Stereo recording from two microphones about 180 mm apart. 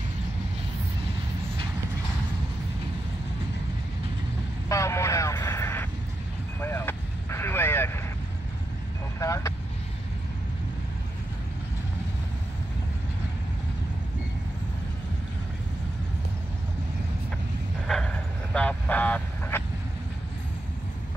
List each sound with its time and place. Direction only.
4.6 s vehicle: 15° left (ahead or behind)
9.2 s vehicle: 15° left (ahead or behind)
17.8 s vehicle: 5° left (ahead or behind)